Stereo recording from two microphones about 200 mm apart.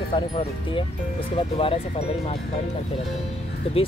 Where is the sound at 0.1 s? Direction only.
25° left (ahead or behind).